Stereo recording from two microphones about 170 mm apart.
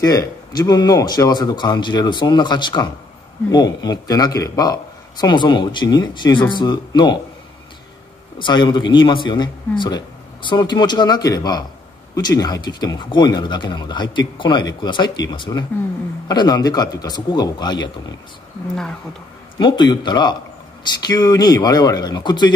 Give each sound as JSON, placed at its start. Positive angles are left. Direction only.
{"t": 0.0, "sound": "speech", "side_deg": 20}
{"t": 8.4, "sound": "speech", "side_deg": 25}
{"t": 19.6, "sound": "speech", "side_deg": 25}